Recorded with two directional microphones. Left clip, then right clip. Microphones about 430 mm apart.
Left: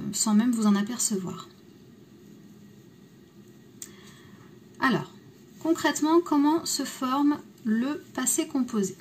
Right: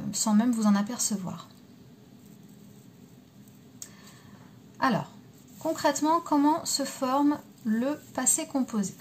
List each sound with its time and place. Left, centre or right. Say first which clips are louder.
0.2 s speech: left 1 dB; centre
4.7 s speech: left 1 dB; centre